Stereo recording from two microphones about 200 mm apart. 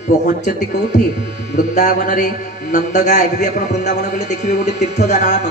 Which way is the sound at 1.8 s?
40° left (ahead or behind).